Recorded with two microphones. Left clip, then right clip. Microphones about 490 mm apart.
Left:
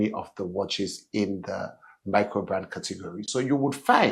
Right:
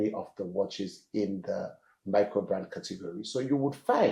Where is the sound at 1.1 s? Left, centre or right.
Left.